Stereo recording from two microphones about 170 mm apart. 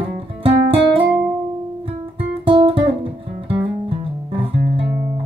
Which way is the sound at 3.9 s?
30° right (ahead or behind).